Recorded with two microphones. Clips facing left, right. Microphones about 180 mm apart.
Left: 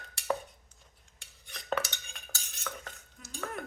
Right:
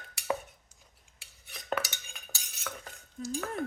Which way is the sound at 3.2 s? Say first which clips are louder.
Right 18 dB; 35° right (ahead or behind).